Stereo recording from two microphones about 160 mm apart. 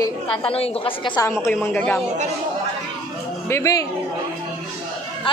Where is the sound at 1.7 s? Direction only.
10° left (ahead or behind).